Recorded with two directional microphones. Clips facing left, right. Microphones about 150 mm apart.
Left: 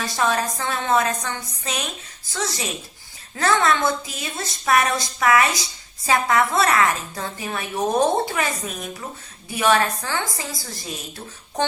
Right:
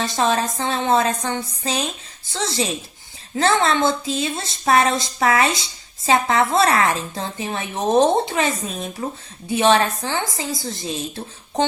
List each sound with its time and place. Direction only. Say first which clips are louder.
0.0 s a woman's voice: right 2 dB; 25° right (ahead or behind)